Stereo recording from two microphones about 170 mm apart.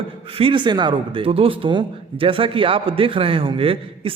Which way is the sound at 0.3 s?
30° right (ahead or behind).